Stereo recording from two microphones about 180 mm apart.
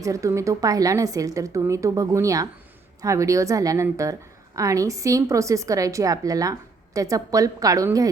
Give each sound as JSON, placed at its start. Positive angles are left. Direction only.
{"t": 0.0, "sound": "a woman's voice", "side_deg": -15}